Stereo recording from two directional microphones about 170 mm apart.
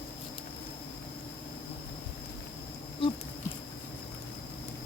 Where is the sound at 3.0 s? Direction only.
30° left (ahead or behind).